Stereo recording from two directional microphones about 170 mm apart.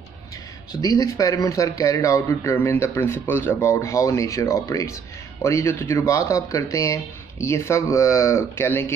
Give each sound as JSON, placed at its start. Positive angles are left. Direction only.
{"t": 0.7, "sound": "speech", "side_deg": 20}